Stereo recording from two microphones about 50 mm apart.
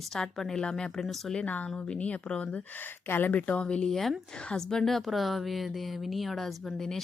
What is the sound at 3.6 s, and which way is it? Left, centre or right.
Speech, centre.